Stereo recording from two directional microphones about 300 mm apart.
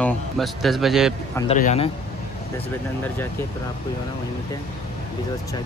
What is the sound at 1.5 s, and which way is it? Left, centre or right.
Speech, left.